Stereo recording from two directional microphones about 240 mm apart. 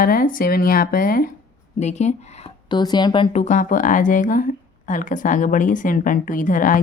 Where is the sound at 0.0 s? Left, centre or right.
Left.